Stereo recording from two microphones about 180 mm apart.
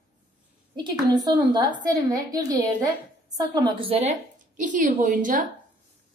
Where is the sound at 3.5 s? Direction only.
25° right (ahead or behind); by 5.4 s 45° right (ahead or behind).